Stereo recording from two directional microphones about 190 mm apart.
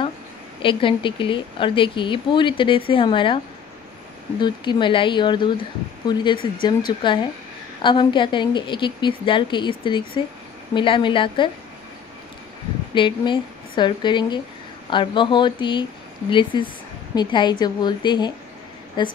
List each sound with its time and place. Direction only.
0.6 s a woman's voice: 25° left (ahead or behind)
4.4 s a woman's voice: 25° left (ahead or behind)
12.9 s a woman's voice: 25° left (ahead or behind)